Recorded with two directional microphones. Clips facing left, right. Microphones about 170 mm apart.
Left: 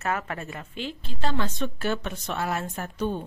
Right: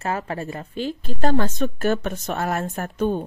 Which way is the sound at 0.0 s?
30° right (ahead or behind).